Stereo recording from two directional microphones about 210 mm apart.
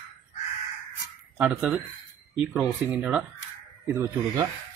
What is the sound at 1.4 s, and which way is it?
Speech, 5° right (ahead or behind).